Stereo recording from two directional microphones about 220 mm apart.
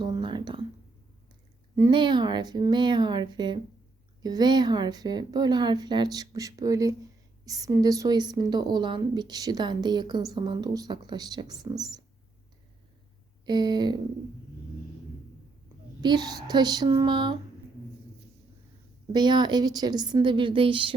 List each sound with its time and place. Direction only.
0.0 s a sound: 20° right (ahead or behind)
1.7 s a woman's voice: 15° right (ahead or behind)
13.4 s a woman's voice: 20° right (ahead or behind)
16.0 s a woman's voice: 20° right (ahead or behind)
19.1 s a woman's voice: 20° right (ahead or behind)